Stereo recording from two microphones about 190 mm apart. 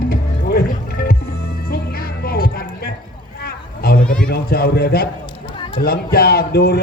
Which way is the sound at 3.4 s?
55° left (ahead or behind).